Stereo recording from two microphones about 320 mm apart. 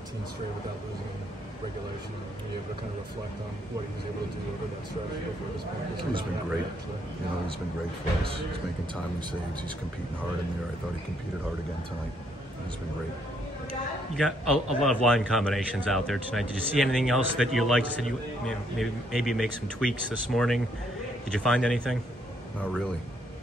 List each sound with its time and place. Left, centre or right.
14.1 s a man's voice: centre